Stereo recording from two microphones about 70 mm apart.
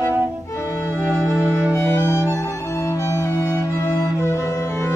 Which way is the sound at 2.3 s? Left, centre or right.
Left.